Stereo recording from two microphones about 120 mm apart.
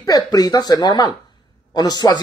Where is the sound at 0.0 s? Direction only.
30° left (ahead or behind).